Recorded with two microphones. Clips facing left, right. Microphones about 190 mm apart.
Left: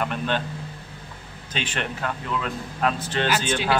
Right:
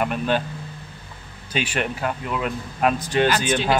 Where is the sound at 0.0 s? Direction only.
10° right (ahead or behind).